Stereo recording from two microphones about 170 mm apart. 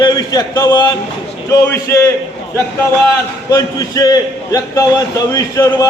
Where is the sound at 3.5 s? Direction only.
20° left (ahead or behind).